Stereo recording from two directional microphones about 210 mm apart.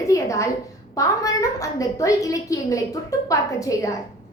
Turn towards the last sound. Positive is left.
turn(degrees=15)  # may be behind; listen again after turning